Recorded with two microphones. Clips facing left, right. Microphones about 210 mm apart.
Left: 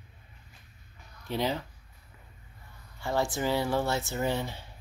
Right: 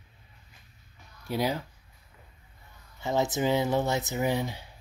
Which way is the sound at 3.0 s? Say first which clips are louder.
Right 2 dB; 20° right (ahead or behind).